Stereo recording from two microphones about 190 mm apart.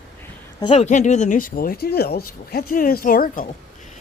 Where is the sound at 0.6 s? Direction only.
30° left (ahead or behind).